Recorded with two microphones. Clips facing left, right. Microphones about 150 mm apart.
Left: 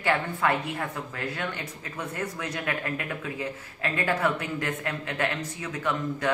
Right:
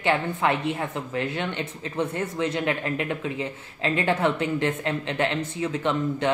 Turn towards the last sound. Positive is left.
turn(degrees=-25)  # may be behind; listen again after turning